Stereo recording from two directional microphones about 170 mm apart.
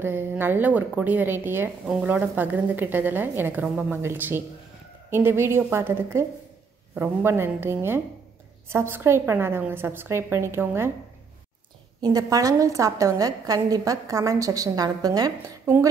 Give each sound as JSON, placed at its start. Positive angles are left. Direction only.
{"t": 0.0, "sound": "a woman's voice", "side_deg": -15}
{"t": 12.0, "sound": "a woman's voice", "side_deg": -20}